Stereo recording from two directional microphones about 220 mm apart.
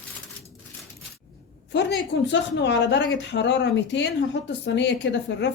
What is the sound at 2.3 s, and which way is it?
Speech, 55° left (ahead or behind).